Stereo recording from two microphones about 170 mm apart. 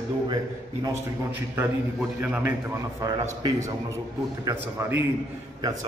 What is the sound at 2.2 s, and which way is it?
A man's voice, 10° right (ahead or behind).